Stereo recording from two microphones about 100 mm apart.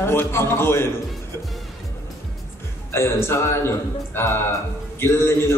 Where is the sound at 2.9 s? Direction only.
25° left (ahead or behind).